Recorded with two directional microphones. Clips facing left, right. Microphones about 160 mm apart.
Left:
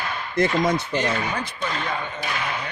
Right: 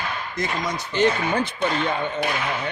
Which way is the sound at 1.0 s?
25° right (ahead or behind).